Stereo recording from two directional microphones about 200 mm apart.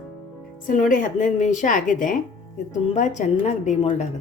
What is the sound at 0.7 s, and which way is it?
A woman's voice, 40° left (ahead or behind).